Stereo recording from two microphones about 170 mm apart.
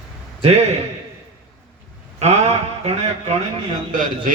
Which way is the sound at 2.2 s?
40° right (ahead or behind).